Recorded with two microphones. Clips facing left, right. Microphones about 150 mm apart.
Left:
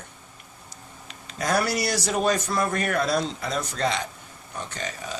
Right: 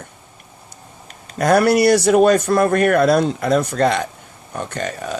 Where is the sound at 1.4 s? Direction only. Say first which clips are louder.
Right 11 dB; 60° right (ahead or behind).